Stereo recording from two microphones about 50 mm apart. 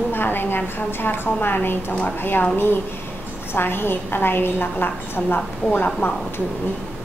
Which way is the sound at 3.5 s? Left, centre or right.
Left.